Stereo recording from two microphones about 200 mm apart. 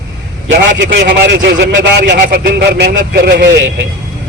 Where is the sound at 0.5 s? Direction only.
65° right (ahead or behind).